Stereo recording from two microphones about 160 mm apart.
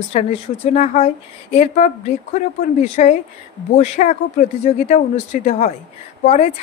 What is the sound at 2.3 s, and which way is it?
Speech, 50° left (ahead or behind).